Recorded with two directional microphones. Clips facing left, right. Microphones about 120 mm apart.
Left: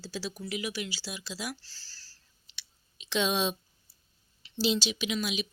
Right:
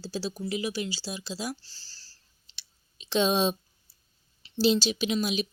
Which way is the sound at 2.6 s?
35° right (ahead or behind).